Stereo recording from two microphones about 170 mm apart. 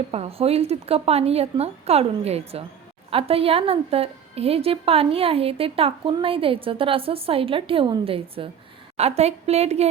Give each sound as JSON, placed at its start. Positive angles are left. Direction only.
{"t": 0.1, "sound": "a woman's voice", "side_deg": -35}